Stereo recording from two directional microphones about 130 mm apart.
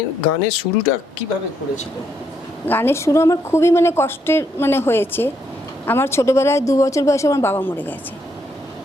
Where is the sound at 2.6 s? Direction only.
15° left (ahead or behind).